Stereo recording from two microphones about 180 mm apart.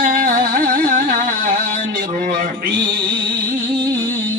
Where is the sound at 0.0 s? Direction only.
50° right (ahead or behind).